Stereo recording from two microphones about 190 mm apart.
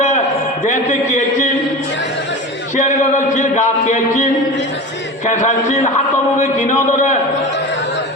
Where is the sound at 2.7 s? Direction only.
40° left (ahead or behind).